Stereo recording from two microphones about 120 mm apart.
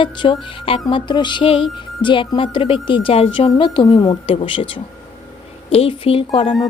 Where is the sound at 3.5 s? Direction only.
40° left (ahead or behind).